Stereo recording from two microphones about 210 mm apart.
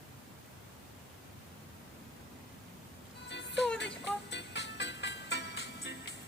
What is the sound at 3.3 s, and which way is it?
Music, 55° left (ahead or behind).